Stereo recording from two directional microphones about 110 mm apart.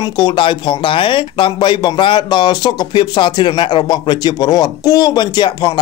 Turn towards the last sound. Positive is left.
turn(degrees=40)  # may be behind; listen again after turning